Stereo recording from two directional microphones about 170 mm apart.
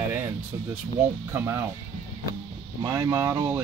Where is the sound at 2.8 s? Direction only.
20° right (ahead or behind).